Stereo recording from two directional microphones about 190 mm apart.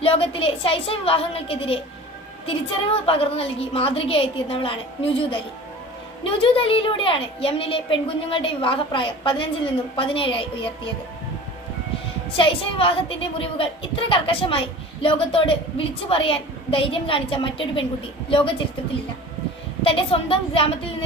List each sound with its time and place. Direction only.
0.0 s a woman's voice: 30° left (ahead or behind)
6.4 s a woman's voice: 30° left (ahead or behind)
12.4 s a woman's voice: 25° left (ahead or behind)
19.8 s a woman's voice: 30° left (ahead or behind)